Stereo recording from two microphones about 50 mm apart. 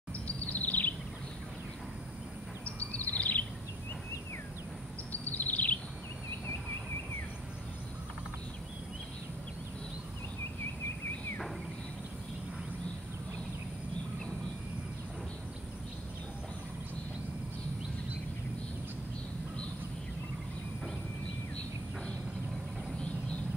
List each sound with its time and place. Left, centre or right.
0.5 s bird vocalization: left
2.6 s bird vocalization: left
5.1 s a sound: left